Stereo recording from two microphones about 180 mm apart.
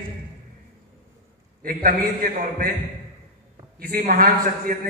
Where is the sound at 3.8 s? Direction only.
60° right (ahead or behind).